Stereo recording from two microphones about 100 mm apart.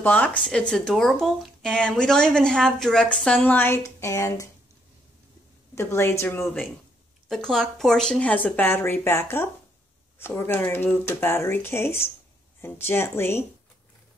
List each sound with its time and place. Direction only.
0.0 s speech: 15° left (ahead or behind)
3.5 s speech: 20° left (ahead or behind)
5.8 s speech: 25° left (ahead or behind)
7.2 s speech: 5° left (ahead or behind); by 13.5 s 25° left (ahead or behind)